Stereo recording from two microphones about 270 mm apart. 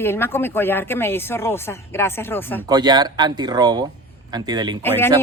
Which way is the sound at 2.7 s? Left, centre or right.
Centre.